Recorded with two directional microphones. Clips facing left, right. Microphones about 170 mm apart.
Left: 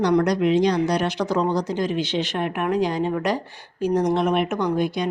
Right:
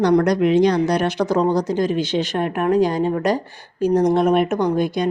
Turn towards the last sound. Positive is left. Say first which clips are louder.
# right 3 dB
turn(degrees=-45)  # may be behind; listen again after turning